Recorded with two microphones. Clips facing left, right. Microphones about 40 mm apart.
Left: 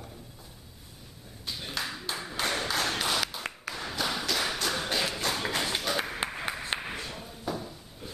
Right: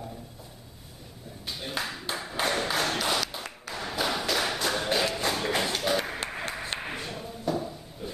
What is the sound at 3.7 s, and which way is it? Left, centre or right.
Tap, centre.